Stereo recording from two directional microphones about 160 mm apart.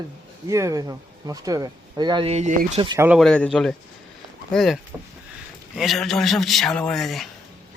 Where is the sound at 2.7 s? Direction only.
30° right (ahead or behind).